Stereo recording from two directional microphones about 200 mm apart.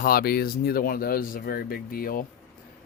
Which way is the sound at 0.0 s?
50° left (ahead or behind).